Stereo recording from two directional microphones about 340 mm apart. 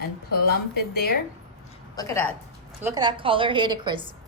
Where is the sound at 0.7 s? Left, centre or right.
Left.